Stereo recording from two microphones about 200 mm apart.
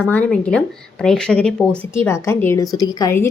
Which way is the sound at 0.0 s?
5° left (ahead or behind).